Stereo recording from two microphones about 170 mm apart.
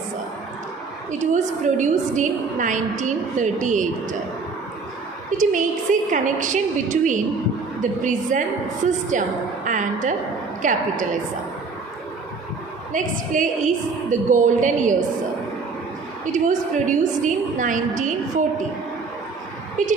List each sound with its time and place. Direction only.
1.2 s a woman's voice: 45° right (ahead or behind)
5.4 s a woman's voice: 50° right (ahead or behind)
12.9 s a woman's voice: 50° right (ahead or behind)
16.2 s a woman's voice: 50° right (ahead or behind)
19.8 s a woman's voice: 50° right (ahead or behind)